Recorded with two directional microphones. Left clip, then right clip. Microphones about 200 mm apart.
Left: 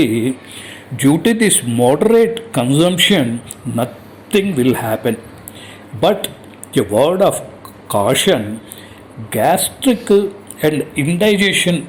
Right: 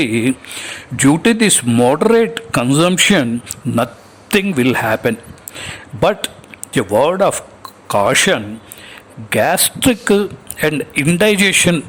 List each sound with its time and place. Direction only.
0.0 s speech: 35° right (ahead or behind)
4.3 s a man's voice: 40° right (ahead or behind)